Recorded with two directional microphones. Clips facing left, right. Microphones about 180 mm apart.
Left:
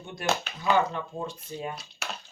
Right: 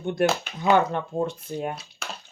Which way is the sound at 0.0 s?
60° right (ahead or behind).